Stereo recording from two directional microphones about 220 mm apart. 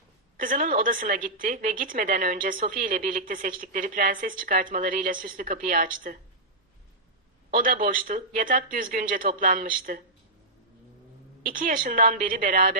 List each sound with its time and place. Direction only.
0.3 s a woman's voice: 40° right (ahead or behind)
7.5 s a woman's voice: 40° right (ahead or behind)
11.4 s a woman's voice: 40° right (ahead or behind)